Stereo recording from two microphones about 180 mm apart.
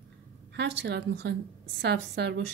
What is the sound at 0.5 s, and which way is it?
Speech, 75° right (ahead or behind).